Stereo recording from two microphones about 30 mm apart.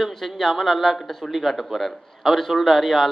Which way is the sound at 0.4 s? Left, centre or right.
Centre.